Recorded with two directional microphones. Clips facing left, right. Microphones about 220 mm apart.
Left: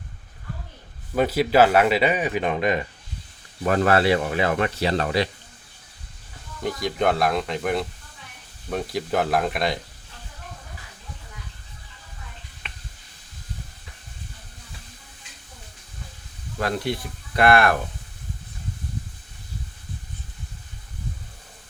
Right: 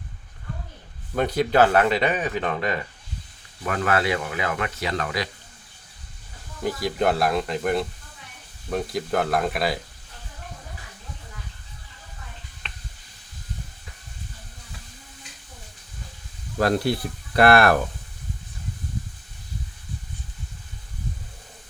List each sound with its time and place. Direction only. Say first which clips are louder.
1.1 s speech: left 2 dB; 5° left (ahead or behind)
3.6 s speech: left 4 dB; 35° left (ahead or behind)
6.6 s speech: even; 5° right (ahead or behind)
16.6 s speech: right 4 dB; 35° right (ahead or behind)